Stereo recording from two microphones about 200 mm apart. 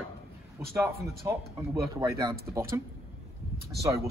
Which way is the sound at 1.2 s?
20° right (ahead or behind).